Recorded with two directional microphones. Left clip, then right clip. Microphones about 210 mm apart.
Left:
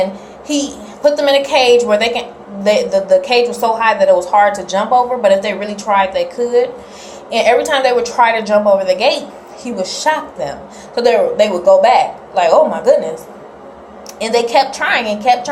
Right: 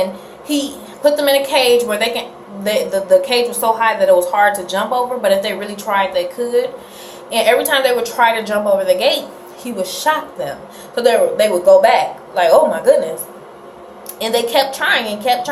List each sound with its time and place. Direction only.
0.4 s a woman's voice: 15° right (ahead or behind)
14.2 s a woman's voice: 20° right (ahead or behind)